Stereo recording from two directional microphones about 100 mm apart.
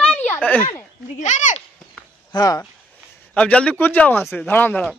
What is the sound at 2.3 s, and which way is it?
Speech, 40° left (ahead or behind).